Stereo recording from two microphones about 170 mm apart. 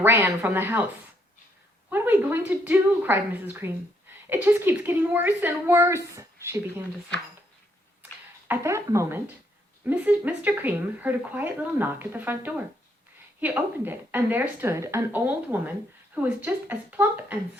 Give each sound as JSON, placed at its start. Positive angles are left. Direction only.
{"t": 0.0, "sound": "speech", "side_deg": -15}
{"t": 1.9, "sound": "speech", "side_deg": -10}
{"t": 8.4, "sound": "speech", "side_deg": -15}